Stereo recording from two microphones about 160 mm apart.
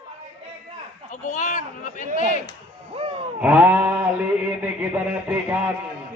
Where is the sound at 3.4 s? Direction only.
10° right (ahead or behind).